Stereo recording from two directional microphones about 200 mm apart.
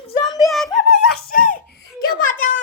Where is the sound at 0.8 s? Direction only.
50° left (ahead or behind).